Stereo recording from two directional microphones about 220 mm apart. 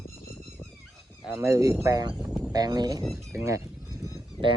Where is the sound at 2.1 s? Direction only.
5° right (ahead or behind).